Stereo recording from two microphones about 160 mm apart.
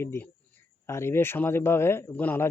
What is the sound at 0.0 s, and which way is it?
Speech, 15° left (ahead or behind).